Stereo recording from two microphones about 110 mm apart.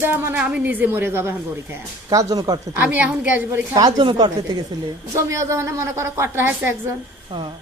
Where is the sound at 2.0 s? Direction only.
35° right (ahead or behind).